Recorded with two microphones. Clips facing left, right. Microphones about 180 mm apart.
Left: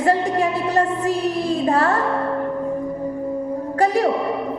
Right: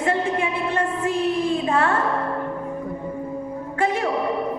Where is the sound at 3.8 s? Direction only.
40° left (ahead or behind).